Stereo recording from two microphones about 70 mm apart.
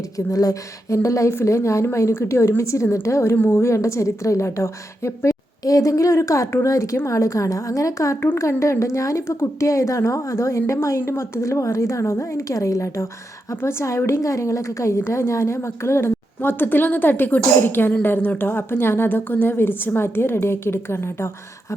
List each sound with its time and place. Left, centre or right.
0.3 s a woman's voice: left